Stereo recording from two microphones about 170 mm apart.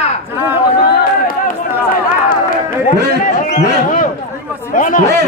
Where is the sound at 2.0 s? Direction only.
55° left (ahead or behind).